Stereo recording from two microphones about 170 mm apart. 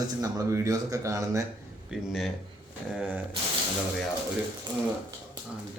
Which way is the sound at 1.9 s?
5° right (ahead or behind).